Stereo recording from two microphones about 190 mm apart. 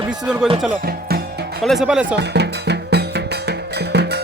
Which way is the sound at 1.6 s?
5° right (ahead or behind).